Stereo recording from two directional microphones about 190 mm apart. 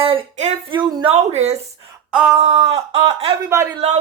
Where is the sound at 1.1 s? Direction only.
35° right (ahead or behind).